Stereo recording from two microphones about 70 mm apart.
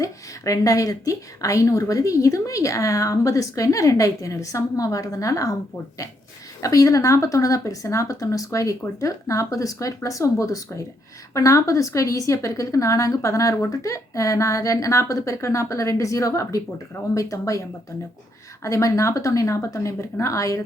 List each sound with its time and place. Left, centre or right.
0.0 s a woman's voice: left
6.6 s a woman's voice: left
18.6 s a woman's voice: left